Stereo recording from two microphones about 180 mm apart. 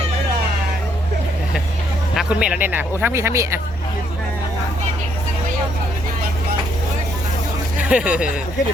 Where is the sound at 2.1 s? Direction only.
5° right (ahead or behind).